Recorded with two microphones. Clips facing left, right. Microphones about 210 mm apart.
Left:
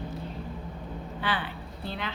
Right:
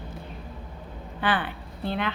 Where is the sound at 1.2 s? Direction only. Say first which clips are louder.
Right 6 dB; 55° right (ahead or behind).